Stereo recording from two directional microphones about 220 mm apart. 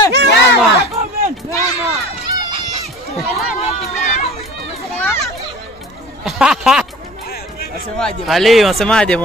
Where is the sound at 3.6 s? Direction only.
30° left (ahead or behind).